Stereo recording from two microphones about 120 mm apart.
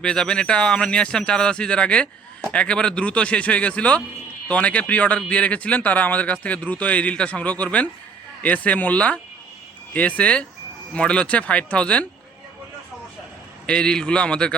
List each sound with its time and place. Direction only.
0.0 s speech: 5° left (ahead or behind)
13.7 s speech: 5° left (ahead or behind)